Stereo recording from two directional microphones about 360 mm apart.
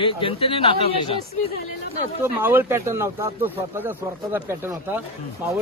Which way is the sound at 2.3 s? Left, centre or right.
Centre.